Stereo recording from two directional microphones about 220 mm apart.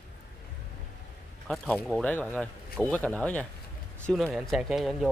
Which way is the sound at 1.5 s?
5° left (ahead or behind).